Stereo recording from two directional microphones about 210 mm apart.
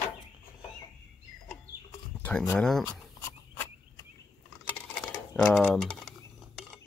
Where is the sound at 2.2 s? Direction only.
5° left (ahead or behind).